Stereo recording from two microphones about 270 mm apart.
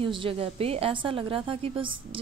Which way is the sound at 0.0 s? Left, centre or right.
Centre.